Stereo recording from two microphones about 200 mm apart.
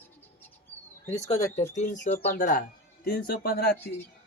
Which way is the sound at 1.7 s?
35° left (ahead or behind).